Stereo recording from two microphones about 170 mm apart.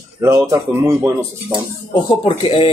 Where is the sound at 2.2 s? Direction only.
30° left (ahead or behind).